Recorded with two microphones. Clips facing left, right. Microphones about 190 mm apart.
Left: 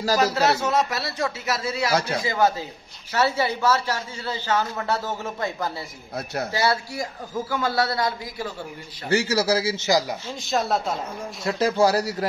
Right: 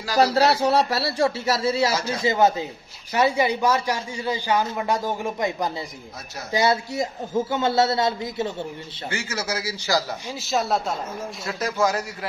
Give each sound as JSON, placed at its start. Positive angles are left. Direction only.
{"t": 0.2, "sound": "speech", "side_deg": -35}
{"t": 1.9, "sound": "speech", "side_deg": 60}
{"t": 2.2, "sound": "a man's voice", "side_deg": -20}
{"t": 6.1, "sound": "speech", "side_deg": 60}
{"t": 6.5, "sound": "a man's voice", "side_deg": -20}
{"t": 9.1, "sound": "a man's voice", "side_deg": 35}
{"t": 10.4, "sound": "speech", "side_deg": 0}
{"t": 11.6, "sound": "speech", "side_deg": 30}